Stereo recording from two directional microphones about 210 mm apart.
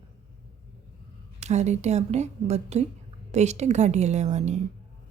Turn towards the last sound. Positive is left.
turn(degrees=-35)  # may be behind; listen again after turning